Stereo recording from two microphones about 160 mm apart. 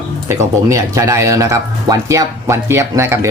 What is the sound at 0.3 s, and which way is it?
Speech, 20° right (ahead or behind).